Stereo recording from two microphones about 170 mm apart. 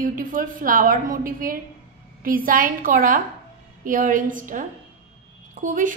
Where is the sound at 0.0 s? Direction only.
50° right (ahead or behind).